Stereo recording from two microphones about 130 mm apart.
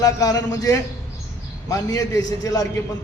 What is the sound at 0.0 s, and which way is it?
A man's voice, 30° left (ahead or behind).